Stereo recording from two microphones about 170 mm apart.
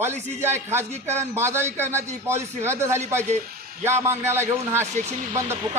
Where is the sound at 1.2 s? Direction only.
15° right (ahead or behind).